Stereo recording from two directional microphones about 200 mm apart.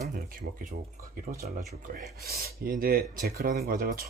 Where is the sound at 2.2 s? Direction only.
50° right (ahead or behind).